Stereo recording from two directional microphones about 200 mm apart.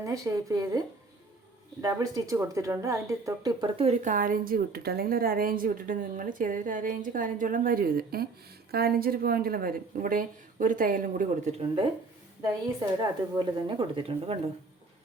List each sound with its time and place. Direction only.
0.0 s speech: 15° right (ahead or behind); by 11.6 s 45° right (ahead or behind)
11.6 s speech: 25° right (ahead or behind)
13.4 s speech: 25° right (ahead or behind)